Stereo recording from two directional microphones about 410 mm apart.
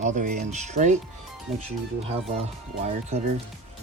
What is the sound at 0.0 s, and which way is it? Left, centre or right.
Speech, centre.